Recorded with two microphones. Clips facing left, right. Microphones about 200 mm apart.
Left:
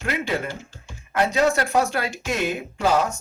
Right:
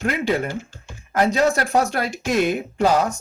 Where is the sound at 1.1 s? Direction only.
40° right (ahead or behind).